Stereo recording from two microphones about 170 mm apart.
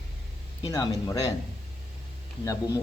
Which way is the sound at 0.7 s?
20° left (ahead or behind).